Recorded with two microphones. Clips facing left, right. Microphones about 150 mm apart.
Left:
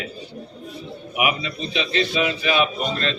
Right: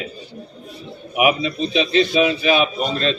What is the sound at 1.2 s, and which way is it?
Speech, 25° right (ahead or behind).